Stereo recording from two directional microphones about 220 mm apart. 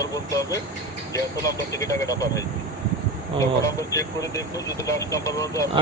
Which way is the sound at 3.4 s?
15° left (ahead or behind).